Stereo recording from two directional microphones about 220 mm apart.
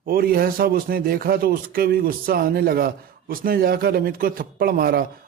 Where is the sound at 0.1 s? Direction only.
40° right (ahead or behind).